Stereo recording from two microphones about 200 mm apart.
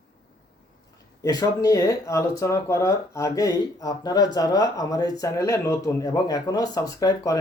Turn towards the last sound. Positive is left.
turn(degrees=15)  # may be behind; listen again after turning